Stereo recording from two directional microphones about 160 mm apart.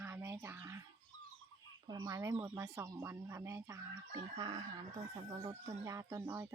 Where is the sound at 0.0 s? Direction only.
15° right (ahead or behind).